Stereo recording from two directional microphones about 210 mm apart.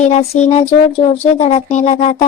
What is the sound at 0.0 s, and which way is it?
Child singing, 30° left (ahead or behind).